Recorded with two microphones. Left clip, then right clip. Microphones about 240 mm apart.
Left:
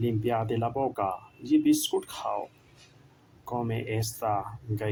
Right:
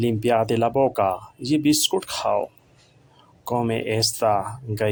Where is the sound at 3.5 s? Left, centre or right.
Right.